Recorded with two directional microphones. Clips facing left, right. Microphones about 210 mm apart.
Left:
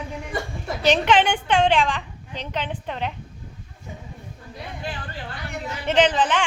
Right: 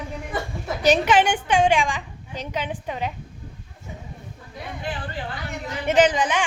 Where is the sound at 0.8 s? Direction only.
10° right (ahead or behind).